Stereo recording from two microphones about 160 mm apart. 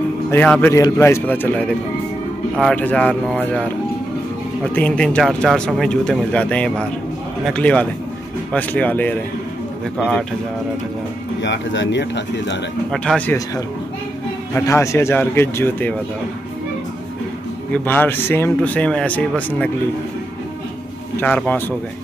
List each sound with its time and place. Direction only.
0.3 s speech: 10° left (ahead or behind)
4.7 s speech: 5° left (ahead or behind)
9.9 s speech: 5° right (ahead or behind)
11.4 s speech: 90° left
12.9 s speech: 5° left (ahead or behind)
14.5 s speech: 15° left (ahead or behind)
17.7 s speech: 10° left (ahead or behind)
21.2 s speech: 10° left (ahead or behind)